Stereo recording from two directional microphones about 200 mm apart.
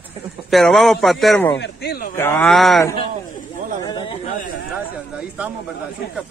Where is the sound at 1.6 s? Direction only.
55° left (ahead or behind).